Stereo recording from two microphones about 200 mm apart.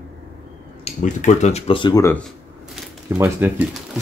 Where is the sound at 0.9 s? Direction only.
35° left (ahead or behind); by 2.2 s 15° left (ahead or behind).